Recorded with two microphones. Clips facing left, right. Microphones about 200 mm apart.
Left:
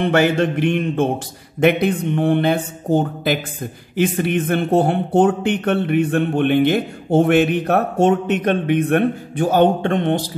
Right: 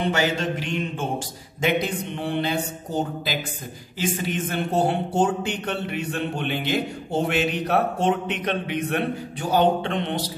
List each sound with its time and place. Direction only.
0.0 s speech: 55° left (ahead or behind)